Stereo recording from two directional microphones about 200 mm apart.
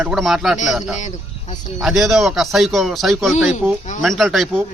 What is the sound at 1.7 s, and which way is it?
Speech, centre (ahead or behind).